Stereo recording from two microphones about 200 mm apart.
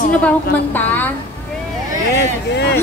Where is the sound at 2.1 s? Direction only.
55° left (ahead or behind).